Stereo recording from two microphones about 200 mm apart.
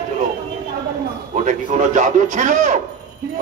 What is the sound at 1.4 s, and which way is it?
A man's voice, 40° right (ahead or behind).